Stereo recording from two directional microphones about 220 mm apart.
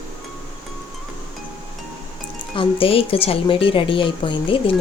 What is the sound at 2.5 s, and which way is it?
Speech, 25° left (ahead or behind).